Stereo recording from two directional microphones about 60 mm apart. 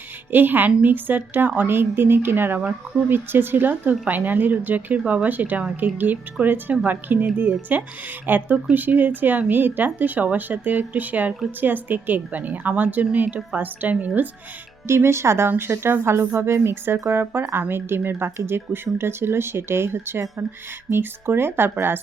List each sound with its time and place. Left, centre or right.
0.3 s speech: right
14.8 s a woman's voice: right